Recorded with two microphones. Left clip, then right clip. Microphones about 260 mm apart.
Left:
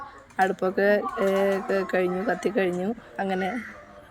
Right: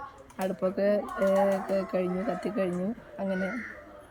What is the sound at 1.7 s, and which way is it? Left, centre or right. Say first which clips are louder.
Speech: left 4 dB; left.